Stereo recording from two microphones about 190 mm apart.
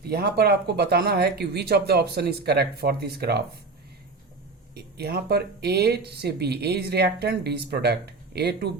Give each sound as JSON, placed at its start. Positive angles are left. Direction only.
{"t": 0.0, "sound": "speech", "side_deg": -55}
{"t": 4.7, "sound": "speech", "side_deg": -55}